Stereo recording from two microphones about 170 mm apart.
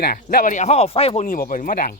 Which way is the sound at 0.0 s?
65° left (ahead or behind).